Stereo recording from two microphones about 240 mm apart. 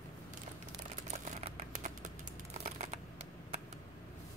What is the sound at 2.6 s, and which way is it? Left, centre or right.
Shuffling cards, right.